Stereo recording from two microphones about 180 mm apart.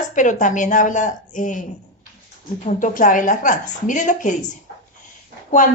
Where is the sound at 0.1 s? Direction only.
45° left (ahead or behind).